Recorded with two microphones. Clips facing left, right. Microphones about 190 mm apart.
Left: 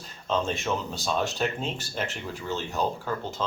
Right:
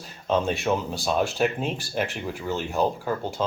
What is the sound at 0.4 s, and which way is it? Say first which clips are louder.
Speech: right 4 dB; 10° right (ahead or behind).